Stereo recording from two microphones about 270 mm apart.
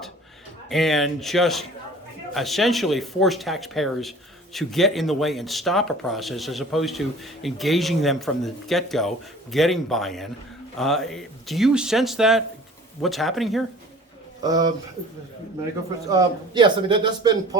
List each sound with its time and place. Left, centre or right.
0.7 s speech: centre
14.4 s a man's voice: centre
16.0 s a man's voice: centre